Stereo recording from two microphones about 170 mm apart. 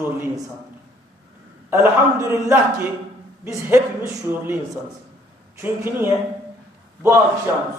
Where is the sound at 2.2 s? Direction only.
15° right (ahead or behind).